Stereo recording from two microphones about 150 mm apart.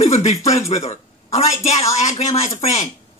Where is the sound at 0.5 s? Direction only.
45° left (ahead or behind).